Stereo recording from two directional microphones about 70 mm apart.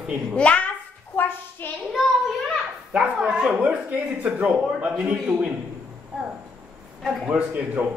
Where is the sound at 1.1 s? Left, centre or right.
Left.